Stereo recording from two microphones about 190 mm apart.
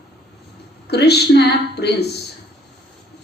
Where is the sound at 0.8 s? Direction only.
60° left (ahead or behind).